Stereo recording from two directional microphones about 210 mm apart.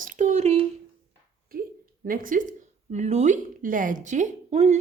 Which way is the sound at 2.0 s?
40° right (ahead or behind).